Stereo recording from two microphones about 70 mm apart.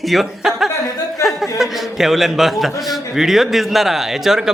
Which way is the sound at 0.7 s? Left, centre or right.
Left.